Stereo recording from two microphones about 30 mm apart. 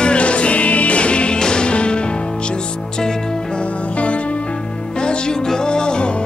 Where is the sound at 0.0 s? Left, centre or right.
Left.